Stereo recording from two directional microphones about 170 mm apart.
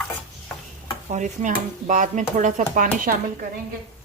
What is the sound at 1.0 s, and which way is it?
Speech, 45° right (ahead or behind).